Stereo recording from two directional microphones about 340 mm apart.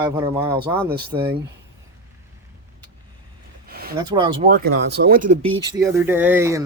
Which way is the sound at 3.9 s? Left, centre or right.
Centre.